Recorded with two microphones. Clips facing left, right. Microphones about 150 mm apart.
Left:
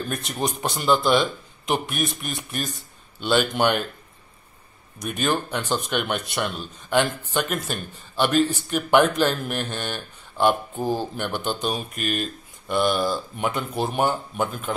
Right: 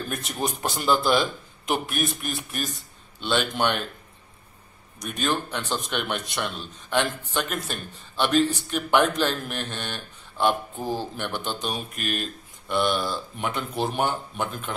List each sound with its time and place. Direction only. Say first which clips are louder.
0.1 s speech: left 1 dB; centre (ahead or behind)
4.9 s speech: left 3 dB; 5° left (ahead or behind)